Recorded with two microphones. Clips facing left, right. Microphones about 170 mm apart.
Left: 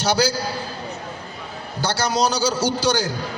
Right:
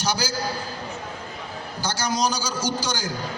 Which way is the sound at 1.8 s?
65° left (ahead or behind).